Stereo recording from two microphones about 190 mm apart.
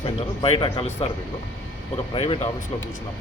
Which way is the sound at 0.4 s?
30° left (ahead or behind).